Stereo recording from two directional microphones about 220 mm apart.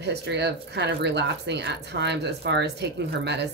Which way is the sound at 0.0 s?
50° right (ahead or behind).